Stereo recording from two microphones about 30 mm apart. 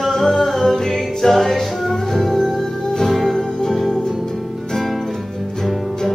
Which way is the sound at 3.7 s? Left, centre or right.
Centre.